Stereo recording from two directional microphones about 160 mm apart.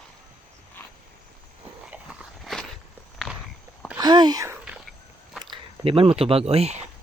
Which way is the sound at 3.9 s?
25° right (ahead or behind).